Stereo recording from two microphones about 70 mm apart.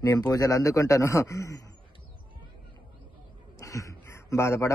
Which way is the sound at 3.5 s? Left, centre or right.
Left.